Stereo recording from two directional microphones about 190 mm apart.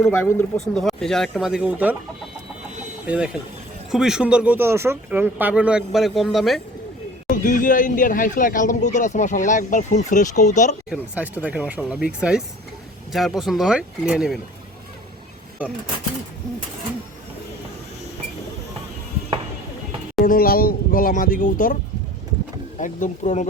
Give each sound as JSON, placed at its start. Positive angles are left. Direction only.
{"t": 0.0, "sound": "speech", "side_deg": 10}
{"t": 3.1, "sound": "speech", "side_deg": -5}
{"t": 7.3, "sound": "speech", "side_deg": 45}
{"t": 11.1, "sound": "speech", "side_deg": -10}
{"t": 15.6, "sound": "speech", "side_deg": -10}
{"t": 20.2, "sound": "speech", "side_deg": 50}
{"t": 22.8, "sound": "speech", "side_deg": 40}